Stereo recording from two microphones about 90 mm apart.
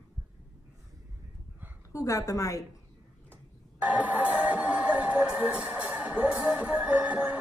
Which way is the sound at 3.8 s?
20° right (ahead or behind).